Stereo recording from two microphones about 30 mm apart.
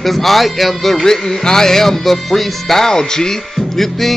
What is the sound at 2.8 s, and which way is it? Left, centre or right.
Music, left.